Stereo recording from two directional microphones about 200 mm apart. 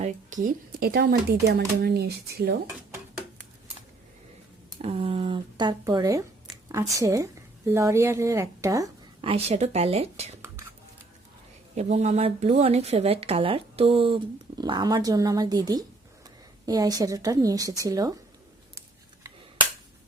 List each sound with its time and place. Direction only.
0.0 s speech: 40° right (ahead or behind)
4.7 s a woman's voice: 30° right (ahead or behind)
9.2 s a woman's voice: 30° right (ahead or behind)
11.7 s a woman's voice: 35° right (ahead or behind); by 18.1 s 15° right (ahead or behind)